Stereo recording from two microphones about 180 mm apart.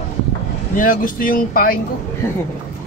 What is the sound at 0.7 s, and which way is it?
Speech, 50° left (ahead or behind).